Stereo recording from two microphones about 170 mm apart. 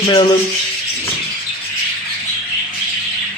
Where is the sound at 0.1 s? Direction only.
25° left (ahead or behind).